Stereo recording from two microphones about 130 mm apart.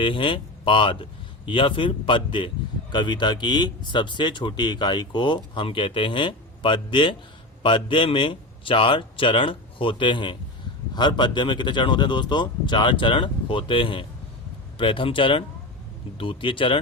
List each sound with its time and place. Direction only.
0.0 s speech: 40° left (ahead or behind)